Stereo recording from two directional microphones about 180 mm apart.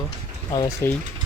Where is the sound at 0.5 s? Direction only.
20° left (ahead or behind).